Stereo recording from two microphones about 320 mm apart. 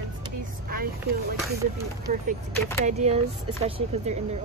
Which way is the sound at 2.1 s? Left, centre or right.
Right.